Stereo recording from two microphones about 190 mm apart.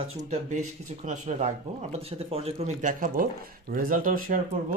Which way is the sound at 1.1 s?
40° right (ahead or behind).